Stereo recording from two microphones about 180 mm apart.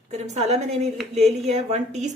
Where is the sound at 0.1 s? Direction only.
40° right (ahead or behind).